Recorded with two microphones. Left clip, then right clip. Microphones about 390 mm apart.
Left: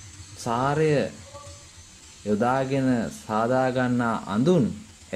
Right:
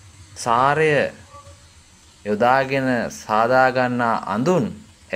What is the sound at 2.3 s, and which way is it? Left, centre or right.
A man's voice, right.